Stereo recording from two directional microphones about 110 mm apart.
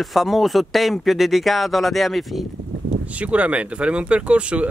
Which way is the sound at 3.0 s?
10° right (ahead or behind).